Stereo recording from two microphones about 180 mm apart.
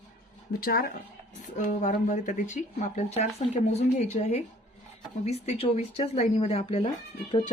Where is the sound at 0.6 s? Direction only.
55° left (ahead or behind).